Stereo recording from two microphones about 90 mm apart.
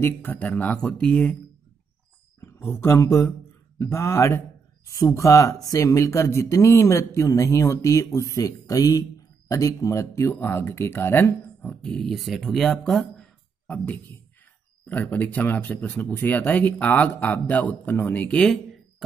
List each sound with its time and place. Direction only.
0.0 s speech: 25° left (ahead or behind)
2.7 s speech: 30° left (ahead or behind)
11.9 s speech: 5° left (ahead or behind)
14.9 s speech: 20° left (ahead or behind)